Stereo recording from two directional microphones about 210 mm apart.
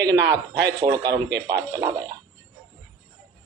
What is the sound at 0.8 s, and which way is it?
Mantra, 20° right (ahead or behind).